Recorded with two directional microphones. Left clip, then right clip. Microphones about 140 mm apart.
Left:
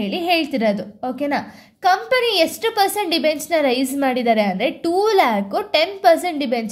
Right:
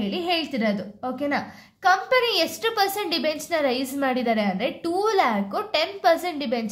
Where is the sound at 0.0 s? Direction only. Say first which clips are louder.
Left 6 dB; 30° left (ahead or behind).